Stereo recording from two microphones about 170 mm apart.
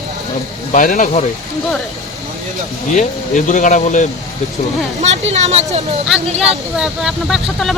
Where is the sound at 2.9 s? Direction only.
45° left (ahead or behind).